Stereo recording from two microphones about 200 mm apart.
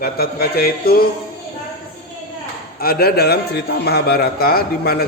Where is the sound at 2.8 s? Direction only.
50° left (ahead or behind).